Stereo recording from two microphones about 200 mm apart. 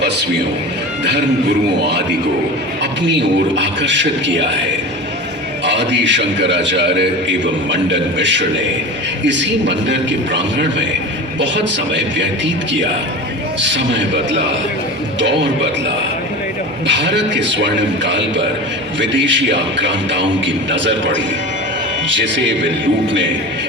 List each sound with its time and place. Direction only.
3.1 s a man's voice: 65° right (ahead or behind)
5.6 s a man's voice: 65° right (ahead or behind)
13.6 s a man's voice: 65° right (ahead or behind)
16.8 s a man's voice: 60° right (ahead or behind)